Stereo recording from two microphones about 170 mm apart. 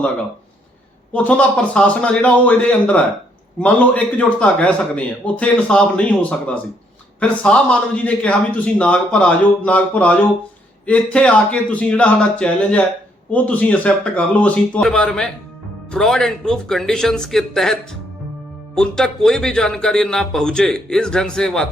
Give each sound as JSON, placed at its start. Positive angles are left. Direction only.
{"t": 1.1, "sound": "a man's voice", "side_deg": 10}